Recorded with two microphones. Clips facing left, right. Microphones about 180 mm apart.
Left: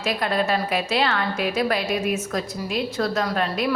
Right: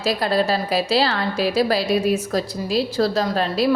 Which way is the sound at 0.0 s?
35° right (ahead or behind).